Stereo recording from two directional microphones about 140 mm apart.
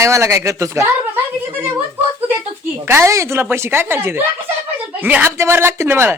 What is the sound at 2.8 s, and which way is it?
Speech, 20° right (ahead or behind).